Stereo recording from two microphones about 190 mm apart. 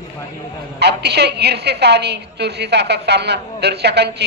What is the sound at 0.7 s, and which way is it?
A woman's voice, 60° right (ahead or behind).